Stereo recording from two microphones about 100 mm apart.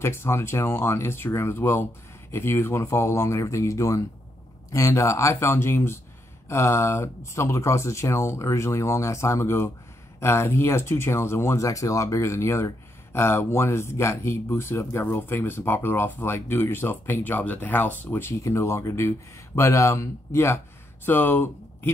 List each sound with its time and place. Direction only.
0.0 s speech: 25° left (ahead or behind)